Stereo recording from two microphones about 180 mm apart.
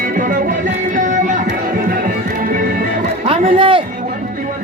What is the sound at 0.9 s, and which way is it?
Music, 45° right (ahead or behind).